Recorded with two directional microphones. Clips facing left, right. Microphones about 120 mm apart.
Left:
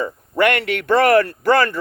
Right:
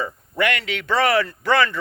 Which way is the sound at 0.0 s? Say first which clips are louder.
Left 5 dB; 50° left (ahead or behind).